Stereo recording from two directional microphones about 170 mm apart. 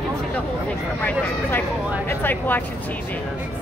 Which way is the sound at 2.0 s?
10° left (ahead or behind).